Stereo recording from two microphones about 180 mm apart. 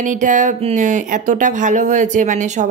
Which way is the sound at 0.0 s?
45° right (ahead or behind).